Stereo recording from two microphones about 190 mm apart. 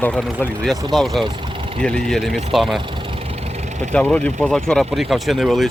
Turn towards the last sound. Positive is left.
turn(degrees=0)  # may be behind; listen again after turning